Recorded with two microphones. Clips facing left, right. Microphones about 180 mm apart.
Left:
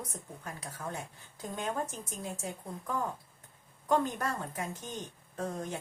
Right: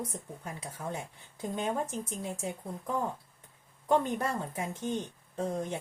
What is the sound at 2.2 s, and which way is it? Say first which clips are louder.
Speech: even; 20° right (ahead or behind).